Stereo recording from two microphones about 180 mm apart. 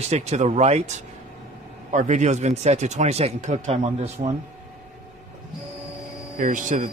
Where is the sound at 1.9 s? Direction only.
40° right (ahead or behind).